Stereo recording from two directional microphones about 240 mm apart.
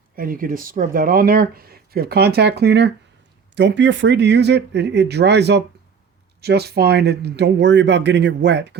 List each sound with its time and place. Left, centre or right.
0.2 s speech: right